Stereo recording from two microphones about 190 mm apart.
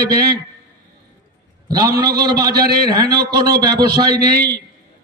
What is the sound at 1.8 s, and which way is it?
Speech, 20° right (ahead or behind).